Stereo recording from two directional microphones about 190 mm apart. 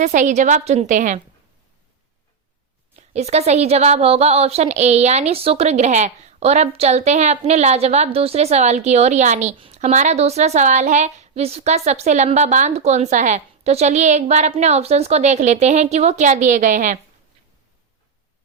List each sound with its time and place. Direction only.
0.0 s a woman's voice: 40° right (ahead or behind)
2.9 s a woman's voice: 35° right (ahead or behind)